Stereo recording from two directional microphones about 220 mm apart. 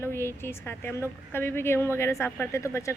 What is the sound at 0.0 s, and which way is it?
A woman's voice, 10° left (ahead or behind).